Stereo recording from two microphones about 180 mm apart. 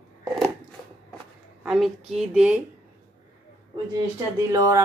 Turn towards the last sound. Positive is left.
turn(degrees=-15)  # may be behind; listen again after turning